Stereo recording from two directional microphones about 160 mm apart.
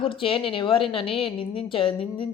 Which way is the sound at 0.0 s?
35° left (ahead or behind).